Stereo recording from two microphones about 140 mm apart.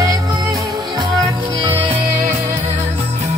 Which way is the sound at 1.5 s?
40° right (ahead or behind).